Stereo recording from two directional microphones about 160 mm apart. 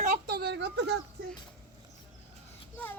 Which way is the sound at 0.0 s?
60° right (ahead or behind).